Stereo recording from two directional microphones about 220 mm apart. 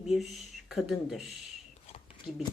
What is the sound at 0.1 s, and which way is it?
Speech, centre (ahead or behind).